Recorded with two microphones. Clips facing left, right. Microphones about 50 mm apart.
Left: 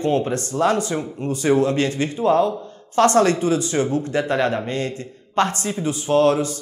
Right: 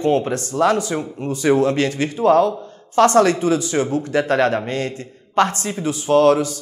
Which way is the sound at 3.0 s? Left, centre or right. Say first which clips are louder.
Right 1 dB; right.